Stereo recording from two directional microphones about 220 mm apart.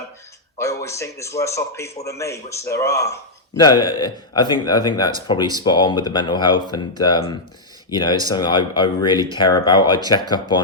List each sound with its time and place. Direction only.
0.6 s speech: 15° left (ahead or behind)